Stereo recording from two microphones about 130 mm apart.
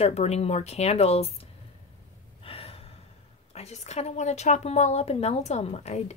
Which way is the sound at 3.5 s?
55° left (ahead or behind).